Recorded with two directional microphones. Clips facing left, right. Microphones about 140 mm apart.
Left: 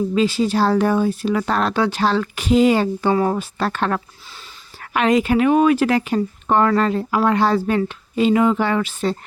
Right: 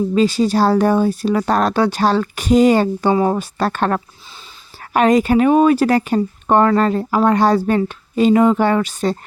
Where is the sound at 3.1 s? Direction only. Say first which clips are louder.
Right 2 dB; 20° right (ahead or behind).